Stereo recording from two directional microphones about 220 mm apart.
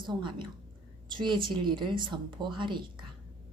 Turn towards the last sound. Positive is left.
turn(degrees=-20)  # may be behind; listen again after turning